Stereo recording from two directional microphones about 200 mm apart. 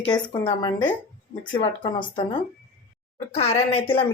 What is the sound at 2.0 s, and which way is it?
Speech, 35° left (ahead or behind).